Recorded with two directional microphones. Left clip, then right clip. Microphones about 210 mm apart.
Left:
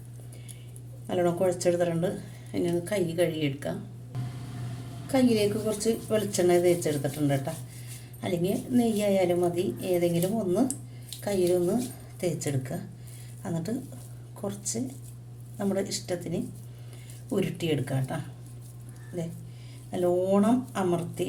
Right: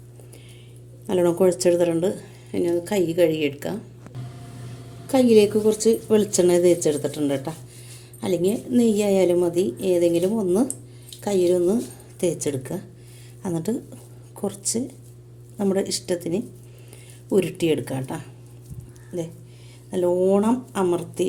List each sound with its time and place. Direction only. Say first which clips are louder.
1.0 s a woman's voice: right 7 dB; 40° right (ahead or behind)
5.0 s a woman's voice: right 8 dB; 40° right (ahead or behind)
19.9 s a woman's voice: right 5 dB; 35° right (ahead or behind)